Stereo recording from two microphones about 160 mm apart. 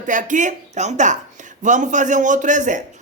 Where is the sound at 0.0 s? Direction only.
55° right (ahead or behind).